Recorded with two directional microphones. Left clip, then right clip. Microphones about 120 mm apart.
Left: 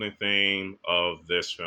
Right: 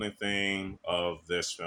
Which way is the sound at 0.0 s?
45° right (ahead or behind).